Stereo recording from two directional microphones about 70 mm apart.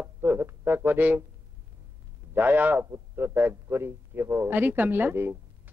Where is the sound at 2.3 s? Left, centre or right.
Right.